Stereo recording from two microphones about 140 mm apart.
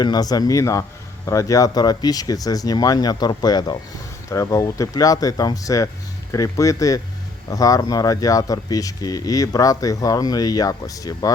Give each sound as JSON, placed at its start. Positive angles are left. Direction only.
{"t": 0.0, "sound": "speech", "side_deg": 30}